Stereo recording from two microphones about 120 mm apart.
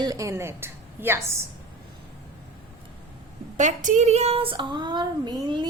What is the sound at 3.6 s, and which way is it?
Child singing, 90° right.